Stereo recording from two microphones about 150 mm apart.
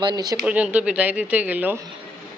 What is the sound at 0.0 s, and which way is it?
Speech, 25° right (ahead or behind).